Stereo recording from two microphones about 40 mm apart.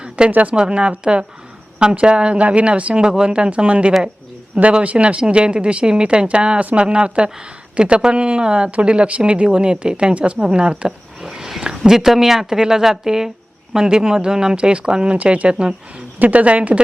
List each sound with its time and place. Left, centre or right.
0.3 s speech: right
0.5 s speech: right
11.2 s a sound: centre
11.8 s speech: centre
15.1 s speech: right